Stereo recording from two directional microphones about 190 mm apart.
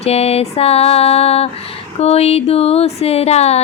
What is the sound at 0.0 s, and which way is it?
Music, 35° left (ahead or behind).